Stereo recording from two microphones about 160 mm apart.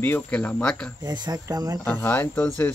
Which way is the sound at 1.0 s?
25° right (ahead or behind).